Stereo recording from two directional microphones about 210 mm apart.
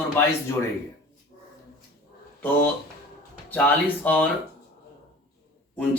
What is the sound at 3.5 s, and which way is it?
Speech, 10° left (ahead or behind).